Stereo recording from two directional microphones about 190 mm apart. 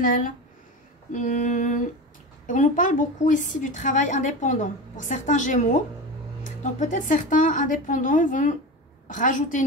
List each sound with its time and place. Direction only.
0.0 s a woman's voice: 45° left (ahead or behind)